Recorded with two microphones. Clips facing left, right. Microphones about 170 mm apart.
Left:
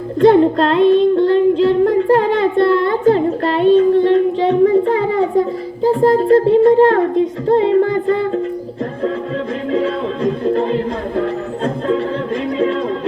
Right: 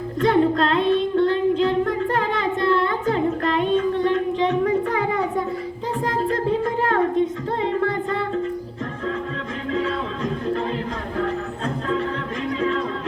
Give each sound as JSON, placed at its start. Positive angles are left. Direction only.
{"t": 0.2, "sound": "child singing", "side_deg": 35}
{"t": 5.8, "sound": "a sound", "side_deg": 35}
{"t": 7.4, "sound": "music", "side_deg": 35}
{"t": 10.4, "sound": "music", "side_deg": 35}